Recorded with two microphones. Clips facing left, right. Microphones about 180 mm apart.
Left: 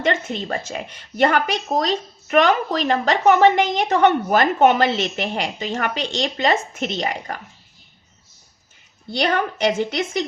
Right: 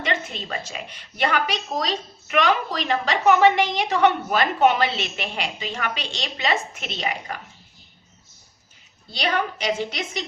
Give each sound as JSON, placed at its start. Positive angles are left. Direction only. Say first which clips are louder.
{"t": 0.0, "sound": "speech", "louder": "left 6 dB", "side_deg": 45}
{"t": 9.2, "sound": "speech", "louder": "left 4 dB", "side_deg": 50}